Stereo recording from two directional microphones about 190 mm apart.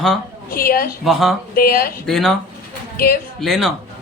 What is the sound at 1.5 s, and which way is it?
Speech, 50° left (ahead or behind).